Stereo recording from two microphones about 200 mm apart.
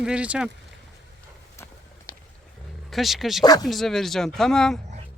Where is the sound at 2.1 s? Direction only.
15° left (ahead or behind).